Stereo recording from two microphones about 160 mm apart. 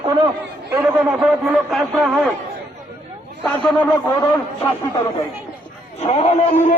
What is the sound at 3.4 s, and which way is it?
Speech, 10° left (ahead or behind).